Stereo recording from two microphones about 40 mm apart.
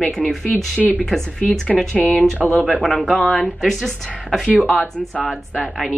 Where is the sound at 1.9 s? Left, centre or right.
Left.